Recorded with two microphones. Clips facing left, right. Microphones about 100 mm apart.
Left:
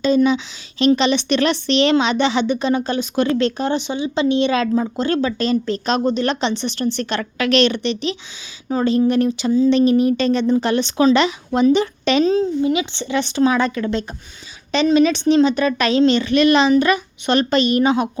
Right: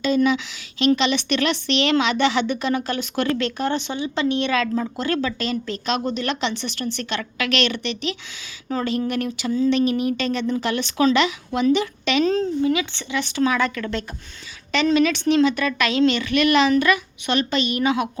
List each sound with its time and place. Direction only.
0.0 s a woman's voice: 30° left (ahead or behind)
12.3 s speech: 15° left (ahead or behind)
12.7 s a woman's voice: 25° left (ahead or behind)